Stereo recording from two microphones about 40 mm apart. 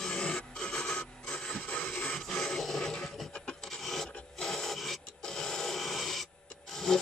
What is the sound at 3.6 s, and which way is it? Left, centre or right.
Filing, centre.